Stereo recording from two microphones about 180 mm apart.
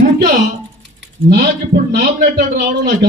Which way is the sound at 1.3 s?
60° right (ahead or behind).